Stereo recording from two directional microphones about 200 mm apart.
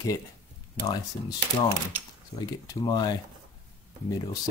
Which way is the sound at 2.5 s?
20° left (ahead or behind).